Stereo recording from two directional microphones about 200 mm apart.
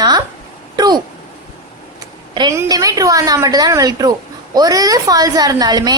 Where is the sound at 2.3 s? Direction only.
20° right (ahead or behind).